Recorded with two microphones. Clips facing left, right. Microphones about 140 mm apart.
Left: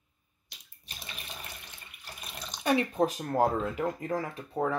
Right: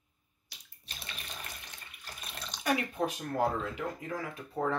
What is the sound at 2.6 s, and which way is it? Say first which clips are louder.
Speech: left 5 dB; 30° left (ahead or behind).